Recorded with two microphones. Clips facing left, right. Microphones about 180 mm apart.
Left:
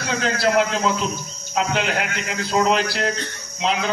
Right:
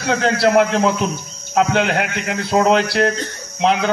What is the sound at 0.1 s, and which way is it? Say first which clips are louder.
A man's voice: right 5 dB; 60° right (ahead or behind).